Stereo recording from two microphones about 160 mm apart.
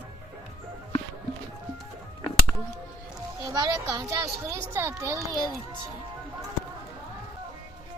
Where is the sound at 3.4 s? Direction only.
25° right (ahead or behind).